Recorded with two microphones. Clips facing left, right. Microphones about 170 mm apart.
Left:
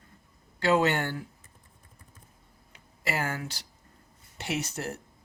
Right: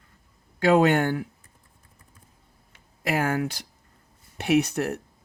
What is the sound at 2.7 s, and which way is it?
Speech, 55° right (ahead or behind).